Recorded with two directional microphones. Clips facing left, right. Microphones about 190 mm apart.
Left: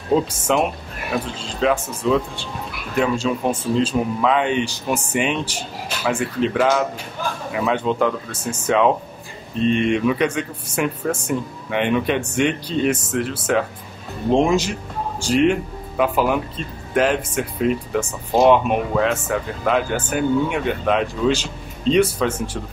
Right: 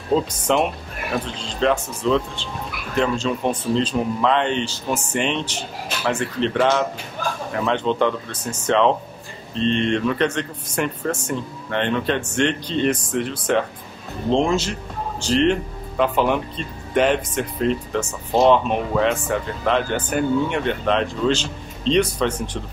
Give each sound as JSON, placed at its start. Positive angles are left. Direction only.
{"t": 0.1, "sound": "speech", "side_deg": 5}